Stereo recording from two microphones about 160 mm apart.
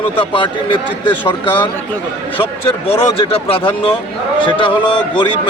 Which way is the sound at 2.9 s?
35° left (ahead or behind).